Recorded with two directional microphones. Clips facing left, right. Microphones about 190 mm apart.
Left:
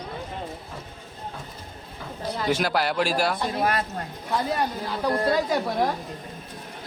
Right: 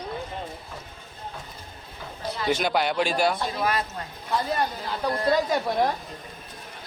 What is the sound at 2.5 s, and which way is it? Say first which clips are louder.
Speech: even; 5° left (ahead or behind).